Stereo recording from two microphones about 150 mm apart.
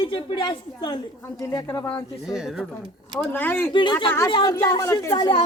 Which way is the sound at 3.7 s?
35° left (ahead or behind).